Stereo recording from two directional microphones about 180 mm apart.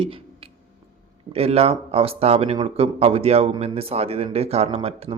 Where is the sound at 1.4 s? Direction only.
35° right (ahead or behind).